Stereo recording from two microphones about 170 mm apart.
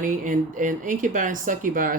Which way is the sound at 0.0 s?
50° right (ahead or behind).